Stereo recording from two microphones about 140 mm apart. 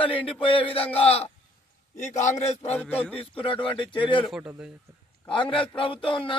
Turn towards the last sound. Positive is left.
turn(degrees=40)  # may be behind; listen again after turning